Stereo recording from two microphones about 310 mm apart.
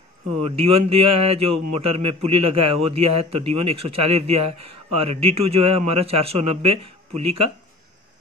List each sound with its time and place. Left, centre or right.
0.5 s speech: centre